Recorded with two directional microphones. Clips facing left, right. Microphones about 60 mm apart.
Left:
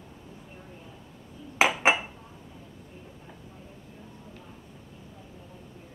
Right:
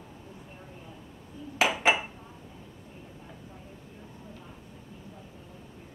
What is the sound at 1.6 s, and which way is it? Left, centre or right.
Dishes, left.